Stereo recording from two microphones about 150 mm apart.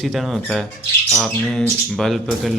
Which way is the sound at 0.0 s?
Centre (ahead or behind).